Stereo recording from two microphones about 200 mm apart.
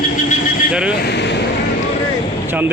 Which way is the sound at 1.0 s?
60° left (ahead or behind).